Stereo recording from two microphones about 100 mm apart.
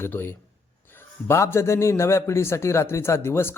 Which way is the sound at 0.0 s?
20° left (ahead or behind).